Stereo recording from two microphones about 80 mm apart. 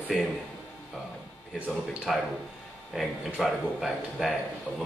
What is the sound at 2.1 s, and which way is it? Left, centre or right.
Speech, centre.